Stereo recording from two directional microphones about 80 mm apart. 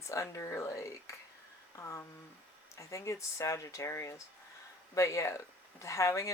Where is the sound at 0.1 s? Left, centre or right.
Left.